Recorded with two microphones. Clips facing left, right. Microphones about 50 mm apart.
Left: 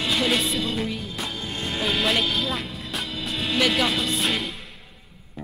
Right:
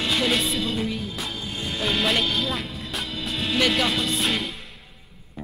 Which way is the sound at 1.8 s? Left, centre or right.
Centre.